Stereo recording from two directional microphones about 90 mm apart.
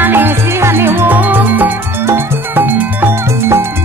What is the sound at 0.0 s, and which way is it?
Music, 20° right (ahead or behind).